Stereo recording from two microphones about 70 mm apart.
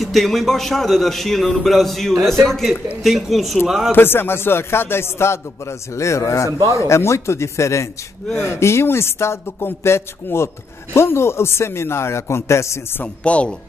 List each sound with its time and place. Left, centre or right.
0.0 s a man's voice: centre
3.9 s speech: left
13.0 s speech: centre